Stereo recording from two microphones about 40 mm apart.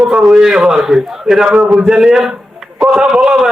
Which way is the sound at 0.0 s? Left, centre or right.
Right.